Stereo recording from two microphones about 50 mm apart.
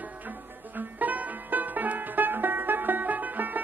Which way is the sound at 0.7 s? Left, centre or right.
Right.